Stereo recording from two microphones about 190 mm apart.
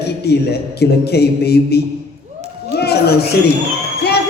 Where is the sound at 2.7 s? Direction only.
55° left (ahead or behind).